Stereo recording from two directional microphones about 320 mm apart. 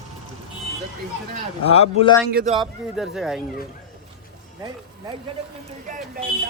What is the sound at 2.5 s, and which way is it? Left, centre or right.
Speech, centre.